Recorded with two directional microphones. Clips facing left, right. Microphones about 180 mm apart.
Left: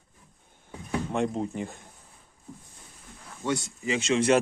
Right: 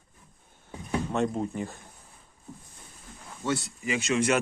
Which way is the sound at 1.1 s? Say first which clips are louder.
Even; 20° left (ahead or behind).